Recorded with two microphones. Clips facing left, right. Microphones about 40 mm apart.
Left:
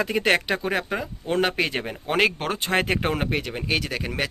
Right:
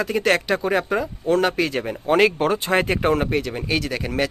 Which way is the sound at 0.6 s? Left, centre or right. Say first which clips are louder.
Right 5 dB; centre.